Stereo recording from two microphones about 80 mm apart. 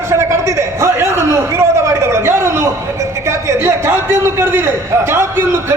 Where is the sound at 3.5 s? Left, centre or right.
Right.